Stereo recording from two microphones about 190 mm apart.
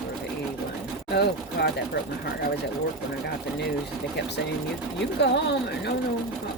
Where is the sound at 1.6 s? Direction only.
60° left (ahead or behind).